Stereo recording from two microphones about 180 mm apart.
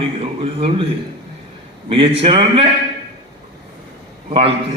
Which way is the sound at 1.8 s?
30° right (ahead or behind).